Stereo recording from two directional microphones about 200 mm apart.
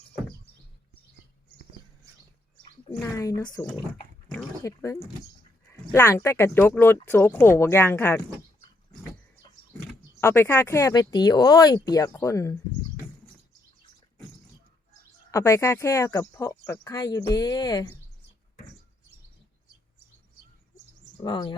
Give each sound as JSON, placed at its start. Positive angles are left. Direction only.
{"t": 3.0, "sound": "speech", "side_deg": 15}
{"t": 10.2, "sound": "speech", "side_deg": 10}
{"t": 15.3, "sound": "speech", "side_deg": 15}
{"t": 21.2, "sound": "speech", "side_deg": 20}